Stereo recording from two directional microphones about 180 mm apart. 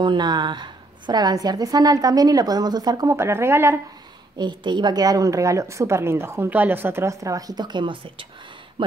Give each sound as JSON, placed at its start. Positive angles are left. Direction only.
{"t": 0.0, "sound": "a woman's voice", "side_deg": -25}
{"t": 4.4, "sound": "a woman's voice", "side_deg": -25}